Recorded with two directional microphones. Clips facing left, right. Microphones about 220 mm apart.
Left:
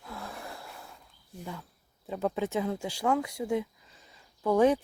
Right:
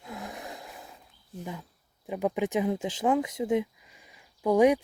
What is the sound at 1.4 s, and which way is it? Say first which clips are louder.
Speech: right 2 dB; 15° right (ahead or behind).